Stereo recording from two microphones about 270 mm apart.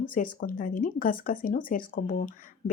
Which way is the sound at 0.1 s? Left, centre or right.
Left.